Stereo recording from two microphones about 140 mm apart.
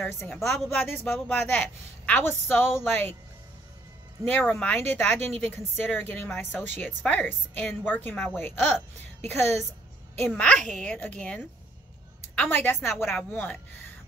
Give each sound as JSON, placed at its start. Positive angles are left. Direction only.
{"t": 0.0, "sound": "a woman's voice", "side_deg": 15}
{"t": 0.4, "sound": "a woman's voice", "side_deg": 0}
{"t": 0.7, "sound": "a woman's voice", "side_deg": 15}
{"t": 4.3, "sound": "a woman's voice", "side_deg": 10}